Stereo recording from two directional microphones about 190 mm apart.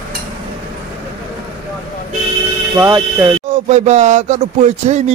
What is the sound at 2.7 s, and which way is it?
Speech, 15° right (ahead or behind).